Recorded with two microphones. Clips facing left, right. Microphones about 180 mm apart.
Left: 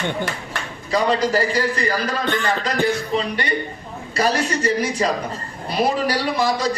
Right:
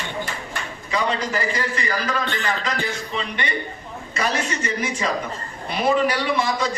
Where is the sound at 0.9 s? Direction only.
35° left (ahead or behind).